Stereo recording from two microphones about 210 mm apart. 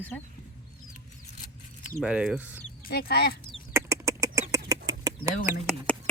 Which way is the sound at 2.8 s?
45° left (ahead or behind).